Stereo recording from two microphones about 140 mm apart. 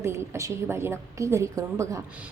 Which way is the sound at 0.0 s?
20° right (ahead or behind).